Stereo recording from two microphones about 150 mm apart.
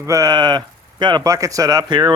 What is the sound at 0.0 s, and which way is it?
Speech, 20° right (ahead or behind).